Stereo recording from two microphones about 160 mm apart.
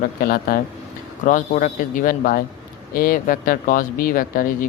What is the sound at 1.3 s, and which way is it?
Speech, 55° left (ahead or behind).